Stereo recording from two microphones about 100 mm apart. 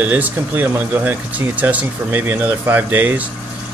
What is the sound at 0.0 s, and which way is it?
Speech, 15° right (ahead or behind).